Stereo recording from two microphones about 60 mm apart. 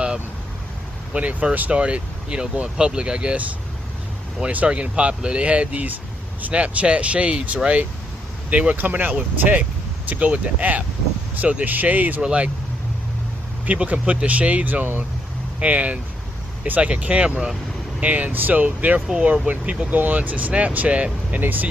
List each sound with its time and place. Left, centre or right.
1.1 s speech: right
12.2 s speech: centre
13.7 s speech: right
18.9 s speech: centre